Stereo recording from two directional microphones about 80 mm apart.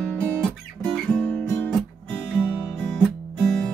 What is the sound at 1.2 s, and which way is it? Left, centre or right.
Guitar, centre.